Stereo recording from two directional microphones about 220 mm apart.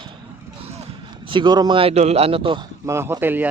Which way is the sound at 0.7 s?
25° right (ahead or behind).